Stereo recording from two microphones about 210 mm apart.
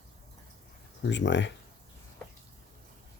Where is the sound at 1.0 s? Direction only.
60° left (ahead or behind).